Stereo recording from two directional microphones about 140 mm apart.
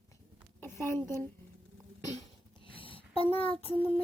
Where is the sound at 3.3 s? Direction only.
40° left (ahead or behind).